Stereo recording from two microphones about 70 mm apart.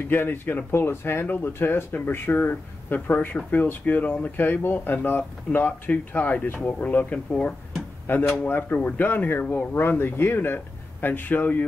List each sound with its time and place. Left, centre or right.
0.1 s speech: left